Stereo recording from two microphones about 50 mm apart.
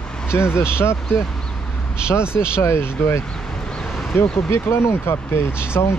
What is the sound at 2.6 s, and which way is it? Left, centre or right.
Speech, left.